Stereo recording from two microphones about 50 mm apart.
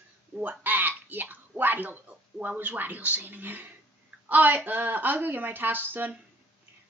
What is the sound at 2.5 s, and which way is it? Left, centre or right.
Speech, right.